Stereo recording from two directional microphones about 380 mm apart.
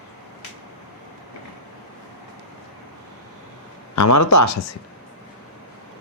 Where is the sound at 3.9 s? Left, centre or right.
Left.